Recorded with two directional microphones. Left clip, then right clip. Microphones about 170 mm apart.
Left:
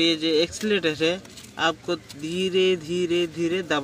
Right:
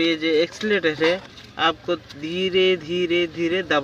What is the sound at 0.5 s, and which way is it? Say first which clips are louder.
Speech: right 3 dB; 20° left (ahead or behind).